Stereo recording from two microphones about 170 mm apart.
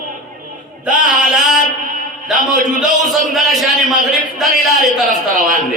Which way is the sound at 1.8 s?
55° right (ahead or behind).